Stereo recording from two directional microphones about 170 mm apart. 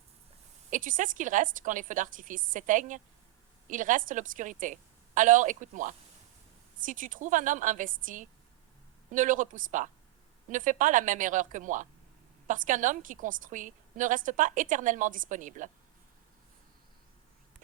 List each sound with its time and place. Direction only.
0.7 s a woman's voice: 50° right (ahead or behind)